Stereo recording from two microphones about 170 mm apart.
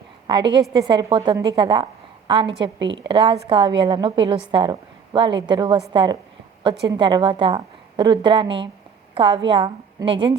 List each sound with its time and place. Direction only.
0.7 s a woman's voice: 25° right (ahead or behind)
2.7 s a woman's voice: 90° right
3.1 s a woman's voice: 30° right (ahead or behind)